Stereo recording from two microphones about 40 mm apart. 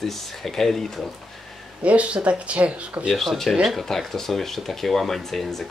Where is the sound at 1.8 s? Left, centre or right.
Right.